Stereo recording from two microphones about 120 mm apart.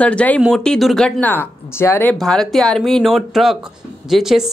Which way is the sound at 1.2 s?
15° left (ahead or behind).